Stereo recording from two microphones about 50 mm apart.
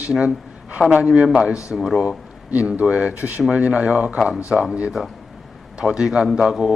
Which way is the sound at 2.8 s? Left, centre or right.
Right.